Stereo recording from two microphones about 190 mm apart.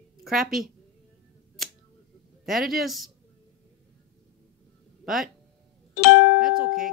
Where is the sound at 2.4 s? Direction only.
Centre (ahead or behind).